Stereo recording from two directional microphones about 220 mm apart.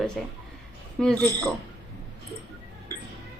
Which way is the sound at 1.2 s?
15° right (ahead or behind).